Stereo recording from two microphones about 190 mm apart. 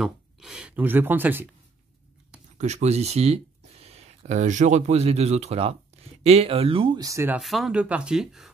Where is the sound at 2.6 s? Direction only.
35° right (ahead or behind); by 7.4 s 15° right (ahead or behind).